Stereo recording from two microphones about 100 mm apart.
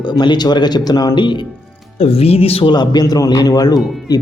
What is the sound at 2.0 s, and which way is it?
Speech, 85° left.